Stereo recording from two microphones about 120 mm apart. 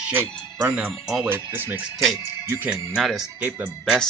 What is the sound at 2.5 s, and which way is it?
Speech, 5° right (ahead or behind).